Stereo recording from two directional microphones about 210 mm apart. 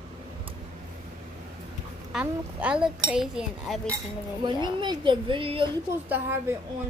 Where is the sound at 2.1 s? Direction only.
5° right (ahead or behind).